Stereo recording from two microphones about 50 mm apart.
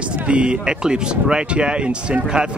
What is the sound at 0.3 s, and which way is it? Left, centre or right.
Speech, right.